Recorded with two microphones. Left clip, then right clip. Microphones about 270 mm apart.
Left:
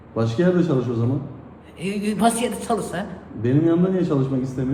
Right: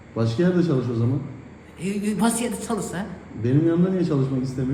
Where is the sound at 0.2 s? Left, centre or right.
Left.